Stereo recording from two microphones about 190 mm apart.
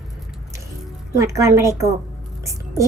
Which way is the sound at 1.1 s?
15° right (ahead or behind).